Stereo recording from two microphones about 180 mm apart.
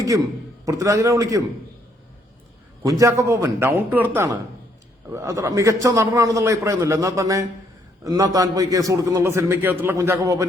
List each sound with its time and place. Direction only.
0.6 s a man's voice: 20° right (ahead or behind)
2.8 s a man's voice: 20° right (ahead or behind)